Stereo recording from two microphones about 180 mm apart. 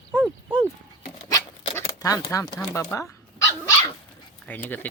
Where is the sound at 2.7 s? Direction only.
15° left (ahead or behind).